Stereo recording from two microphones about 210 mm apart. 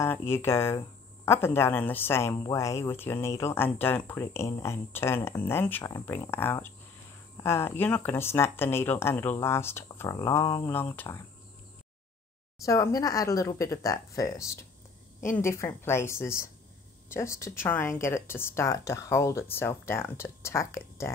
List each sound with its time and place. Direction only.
0.0 s speech: 10° left (ahead or behind)
12.6 s speech: 15° left (ahead or behind)